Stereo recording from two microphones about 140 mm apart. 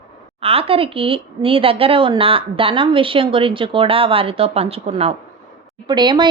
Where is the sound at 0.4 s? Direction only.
45° right (ahead or behind).